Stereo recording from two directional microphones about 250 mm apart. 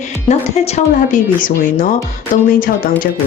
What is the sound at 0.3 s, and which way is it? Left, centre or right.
Speech, left.